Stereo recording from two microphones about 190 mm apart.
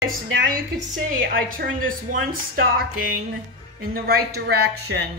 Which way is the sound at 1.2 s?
50° right (ahead or behind).